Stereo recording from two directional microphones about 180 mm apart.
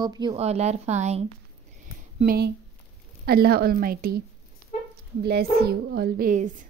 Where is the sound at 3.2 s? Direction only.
60° right (ahead or behind).